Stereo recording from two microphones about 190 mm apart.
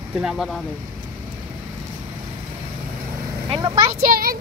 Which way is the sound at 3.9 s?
45° right (ahead or behind).